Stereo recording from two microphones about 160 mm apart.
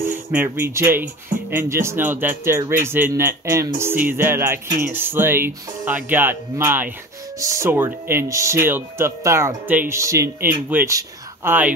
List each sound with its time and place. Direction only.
0.1 s speech: 10° right (ahead or behind)